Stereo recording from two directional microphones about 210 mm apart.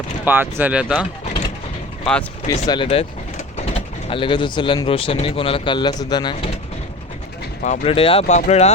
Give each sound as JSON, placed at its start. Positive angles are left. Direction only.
{"t": 0.3, "sound": "speech", "side_deg": -10}
{"t": 2.1, "sound": "speech", "side_deg": 5}
{"t": 2.5, "sound": "speech", "side_deg": 20}
{"t": 7.6, "sound": "speech", "side_deg": 30}